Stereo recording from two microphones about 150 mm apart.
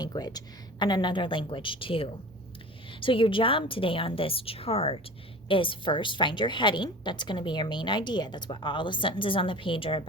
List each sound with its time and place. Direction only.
0.0 s a woman's voice: 25° left (ahead or behind)